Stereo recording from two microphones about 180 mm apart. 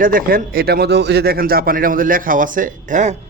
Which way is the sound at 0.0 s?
55° right (ahead or behind).